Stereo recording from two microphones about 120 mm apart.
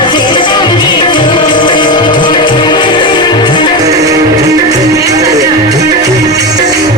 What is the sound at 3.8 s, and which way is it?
Music, 30° right (ahead or behind).